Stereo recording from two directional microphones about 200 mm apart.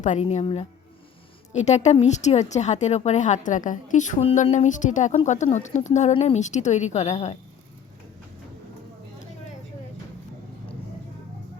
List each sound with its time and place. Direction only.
0.0 s speech: 35° left (ahead or behind)